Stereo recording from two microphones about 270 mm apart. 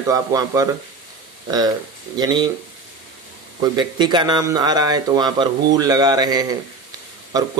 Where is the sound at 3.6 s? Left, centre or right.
Centre.